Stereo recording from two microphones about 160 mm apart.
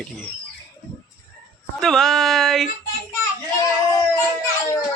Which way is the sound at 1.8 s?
5° left (ahead or behind).